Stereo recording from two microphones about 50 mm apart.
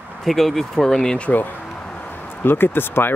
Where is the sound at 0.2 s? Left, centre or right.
Centre.